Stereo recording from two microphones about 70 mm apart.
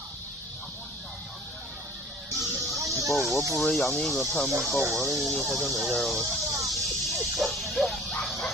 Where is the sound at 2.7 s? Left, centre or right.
Right.